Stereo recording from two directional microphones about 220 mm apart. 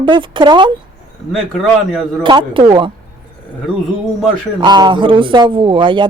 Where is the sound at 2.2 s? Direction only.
20° right (ahead or behind).